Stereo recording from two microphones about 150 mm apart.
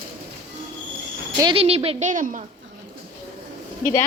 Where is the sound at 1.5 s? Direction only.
40° right (ahead or behind).